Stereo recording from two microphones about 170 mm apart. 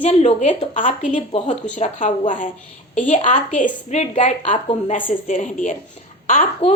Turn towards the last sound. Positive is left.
turn(degrees=50)  # may be behind; listen again after turning